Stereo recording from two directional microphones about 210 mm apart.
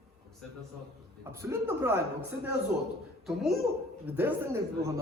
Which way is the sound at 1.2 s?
15° right (ahead or behind).